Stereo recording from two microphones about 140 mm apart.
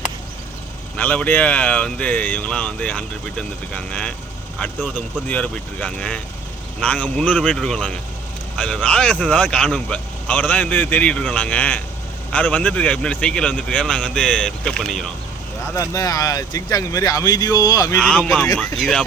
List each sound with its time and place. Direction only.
0.9 s speech: 10° left (ahead or behind)
15.6 s speech: 20° left (ahead or behind)
18.2 s speech: centre (ahead or behind)